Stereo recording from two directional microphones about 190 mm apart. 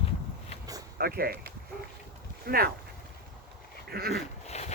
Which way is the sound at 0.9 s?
55° right (ahead or behind).